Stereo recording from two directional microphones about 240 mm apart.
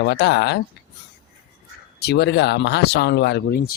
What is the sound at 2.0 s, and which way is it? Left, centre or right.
Speech, left.